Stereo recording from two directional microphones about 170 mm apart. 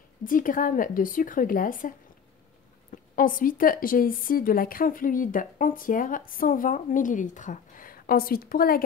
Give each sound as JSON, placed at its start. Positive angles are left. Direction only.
{"t": 0.2, "sound": "a woman's voice", "side_deg": 55}